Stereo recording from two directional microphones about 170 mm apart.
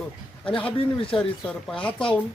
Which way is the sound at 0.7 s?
30° left (ahead or behind).